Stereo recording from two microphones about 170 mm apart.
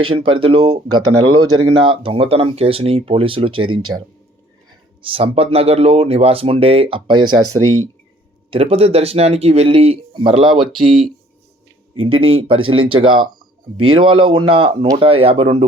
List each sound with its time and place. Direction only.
0.0 s speech: 30° right (ahead or behind)
5.0 s speech: 35° right (ahead or behind)
8.4 s speech: 35° right (ahead or behind)